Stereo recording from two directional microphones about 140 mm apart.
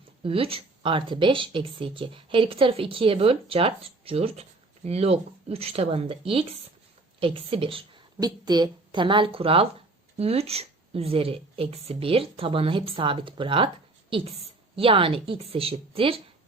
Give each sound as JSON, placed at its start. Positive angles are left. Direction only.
{"t": 0.2, "sound": "speech", "side_deg": -40}
{"t": 8.2, "sound": "speech", "side_deg": -30}